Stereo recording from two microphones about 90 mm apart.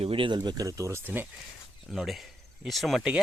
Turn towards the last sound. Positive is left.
turn(degrees=0)  # may be behind; listen again after turning